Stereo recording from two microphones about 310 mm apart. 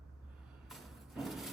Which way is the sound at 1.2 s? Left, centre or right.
Centre.